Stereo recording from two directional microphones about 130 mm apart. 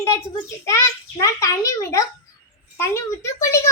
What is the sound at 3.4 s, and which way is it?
Speech, 20° left (ahead or behind).